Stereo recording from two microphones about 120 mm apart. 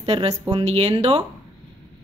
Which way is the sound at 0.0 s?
55° right (ahead or behind).